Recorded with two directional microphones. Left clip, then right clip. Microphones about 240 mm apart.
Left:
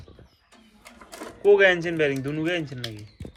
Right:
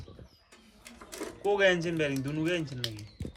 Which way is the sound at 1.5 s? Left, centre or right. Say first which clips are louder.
Left 8 dB; centre.